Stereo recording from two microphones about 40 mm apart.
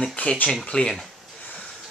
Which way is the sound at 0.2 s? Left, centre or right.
Left.